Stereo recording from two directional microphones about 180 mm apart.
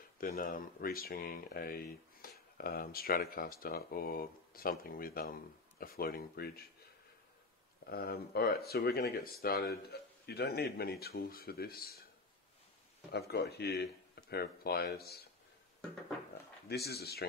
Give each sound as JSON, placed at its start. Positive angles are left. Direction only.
{"t": 0.2, "sound": "speech", "side_deg": 55}
{"t": 7.8, "sound": "speech", "side_deg": 60}
{"t": 13.1, "sound": "speech", "side_deg": 65}
{"t": 16.6, "sound": "speech", "side_deg": 60}